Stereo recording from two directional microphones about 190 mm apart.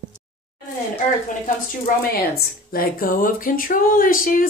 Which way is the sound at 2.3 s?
50° left (ahead or behind).